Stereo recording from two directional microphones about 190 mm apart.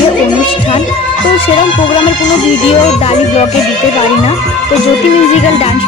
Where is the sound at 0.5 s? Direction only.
25° left (ahead or behind).